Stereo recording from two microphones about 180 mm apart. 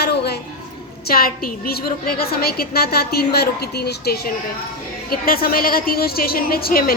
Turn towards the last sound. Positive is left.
turn(degrees=55)  # may be behind; listen again after turning